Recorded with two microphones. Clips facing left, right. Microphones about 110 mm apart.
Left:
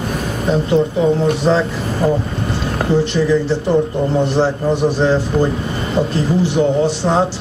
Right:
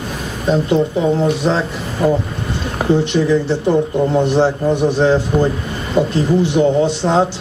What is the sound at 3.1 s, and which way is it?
A man's voice, 15° right (ahead or behind).